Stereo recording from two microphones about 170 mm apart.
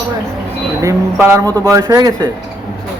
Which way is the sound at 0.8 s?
20° right (ahead or behind).